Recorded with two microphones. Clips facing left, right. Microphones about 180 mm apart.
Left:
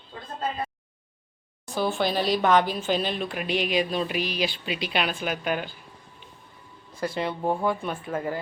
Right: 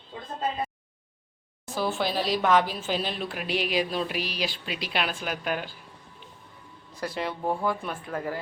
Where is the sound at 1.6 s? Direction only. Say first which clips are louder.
Left 2 dB; centre (ahead or behind).